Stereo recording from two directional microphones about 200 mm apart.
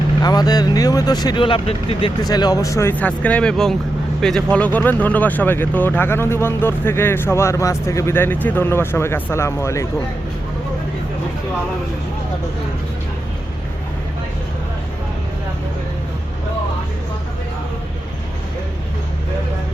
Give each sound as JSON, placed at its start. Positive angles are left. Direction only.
{"t": 0.2, "sound": "speech", "side_deg": 20}